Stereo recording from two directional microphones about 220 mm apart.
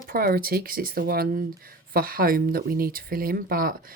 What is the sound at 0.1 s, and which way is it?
Speech, 45° right (ahead or behind).